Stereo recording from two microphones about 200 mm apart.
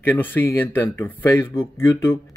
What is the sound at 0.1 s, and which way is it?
Speech, 10° left (ahead or behind).